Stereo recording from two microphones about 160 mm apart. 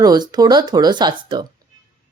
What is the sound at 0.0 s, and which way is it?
A woman's voice, 25° right (ahead or behind).